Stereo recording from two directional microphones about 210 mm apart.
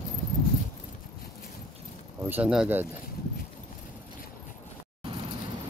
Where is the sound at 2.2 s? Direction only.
5° right (ahead or behind).